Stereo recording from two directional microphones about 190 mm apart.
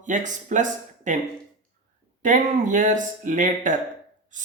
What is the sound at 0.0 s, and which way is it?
Speech, 40° right (ahead or behind).